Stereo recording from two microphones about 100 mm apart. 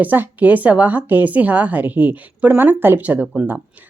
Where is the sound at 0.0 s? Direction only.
20° right (ahead or behind).